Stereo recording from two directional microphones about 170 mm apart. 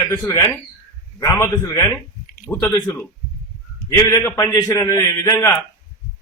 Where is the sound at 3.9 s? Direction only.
15° left (ahead or behind).